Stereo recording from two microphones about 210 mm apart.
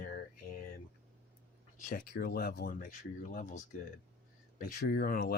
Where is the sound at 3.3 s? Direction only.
35° left (ahead or behind).